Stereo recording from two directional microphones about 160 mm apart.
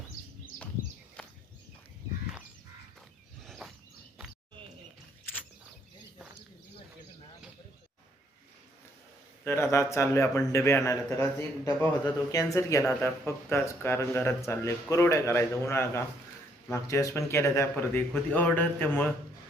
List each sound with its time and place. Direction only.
1.2 s walk: 5° left (ahead or behind)
3.4 s a sound: centre (ahead or behind)
9.4 s speech: 15° left (ahead or behind)
12.8 s speech: 5° left (ahead or behind)